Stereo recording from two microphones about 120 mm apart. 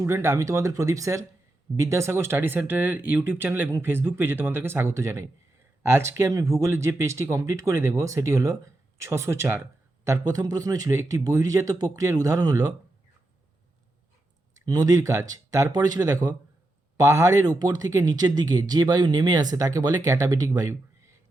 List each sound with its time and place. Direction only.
0.0 s speech: 20° right (ahead or behind)
14.7 s speech: 30° right (ahead or behind)